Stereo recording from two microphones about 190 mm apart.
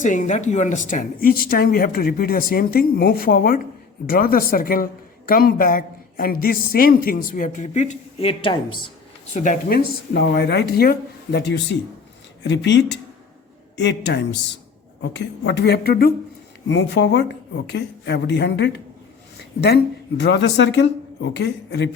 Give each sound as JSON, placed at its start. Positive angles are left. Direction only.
{"t": 0.0, "sound": "a woman's voice", "side_deg": 40}
{"t": 9.3, "sound": "speech", "side_deg": 40}
{"t": 12.4, "sound": "speech", "side_deg": 70}
{"t": 16.6, "sound": "speech", "side_deg": 65}